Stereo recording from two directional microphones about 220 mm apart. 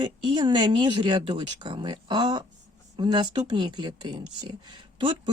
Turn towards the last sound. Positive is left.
turn(degrees=-25)  # may be behind; listen again after turning